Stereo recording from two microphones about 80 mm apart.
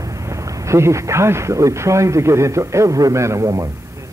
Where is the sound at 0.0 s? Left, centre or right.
Right.